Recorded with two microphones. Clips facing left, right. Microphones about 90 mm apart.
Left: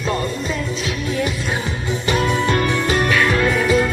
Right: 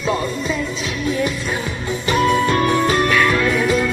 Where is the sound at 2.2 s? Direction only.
45° right (ahead or behind).